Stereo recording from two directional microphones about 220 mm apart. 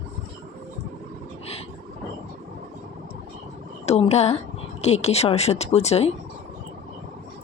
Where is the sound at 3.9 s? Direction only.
30° left (ahead or behind).